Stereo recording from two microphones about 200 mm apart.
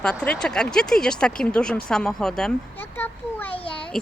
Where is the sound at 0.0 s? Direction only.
5° left (ahead or behind).